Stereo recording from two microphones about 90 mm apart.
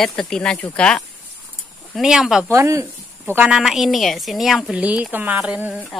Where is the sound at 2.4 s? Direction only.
35° right (ahead or behind).